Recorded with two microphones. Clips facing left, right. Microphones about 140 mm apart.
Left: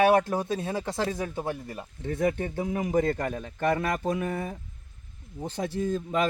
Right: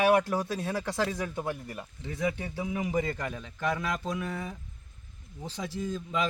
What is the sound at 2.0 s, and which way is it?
A man's voice, 50° left (ahead or behind).